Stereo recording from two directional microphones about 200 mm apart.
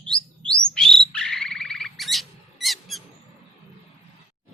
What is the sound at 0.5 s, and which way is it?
Bird, 5° left (ahead or behind).